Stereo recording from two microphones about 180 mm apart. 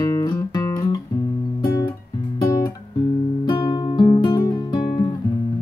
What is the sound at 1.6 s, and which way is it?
Guitar, 20° left (ahead or behind).